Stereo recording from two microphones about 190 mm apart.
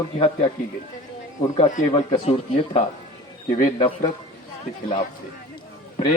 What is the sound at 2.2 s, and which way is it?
Speech, 30° left (ahead or behind).